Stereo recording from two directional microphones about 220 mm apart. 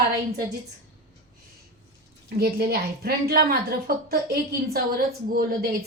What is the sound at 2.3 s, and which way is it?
A woman's voice, 45° right (ahead or behind).